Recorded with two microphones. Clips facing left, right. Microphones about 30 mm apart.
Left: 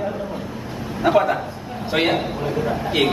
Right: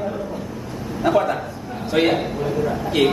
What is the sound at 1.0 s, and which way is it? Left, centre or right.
A man's voice, centre.